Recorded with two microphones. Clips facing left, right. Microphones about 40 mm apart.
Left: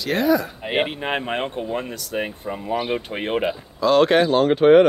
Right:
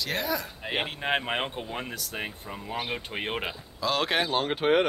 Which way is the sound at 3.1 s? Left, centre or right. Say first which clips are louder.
Left 9 dB; centre.